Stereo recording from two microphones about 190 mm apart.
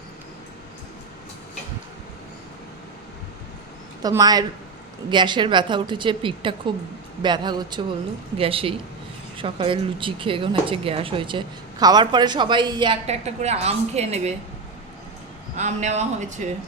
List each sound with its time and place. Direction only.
4.0 s speech: 20° right (ahead or behind)
15.5 s speech: 35° right (ahead or behind)